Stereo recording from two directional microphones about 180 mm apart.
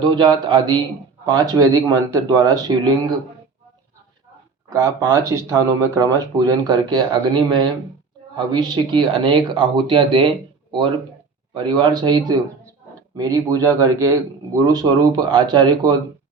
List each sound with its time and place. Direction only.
0.0 s speech: 25° right (ahead or behind)
4.7 s speech: 20° right (ahead or behind)